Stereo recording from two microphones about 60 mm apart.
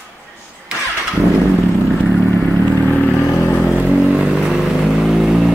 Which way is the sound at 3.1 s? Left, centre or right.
Left.